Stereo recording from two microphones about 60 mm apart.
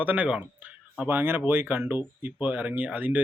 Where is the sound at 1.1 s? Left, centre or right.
Right.